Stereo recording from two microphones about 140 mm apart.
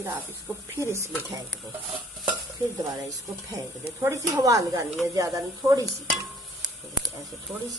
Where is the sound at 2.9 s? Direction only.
25° right (ahead or behind).